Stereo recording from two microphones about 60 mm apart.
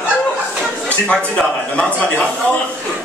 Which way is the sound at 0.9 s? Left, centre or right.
Left.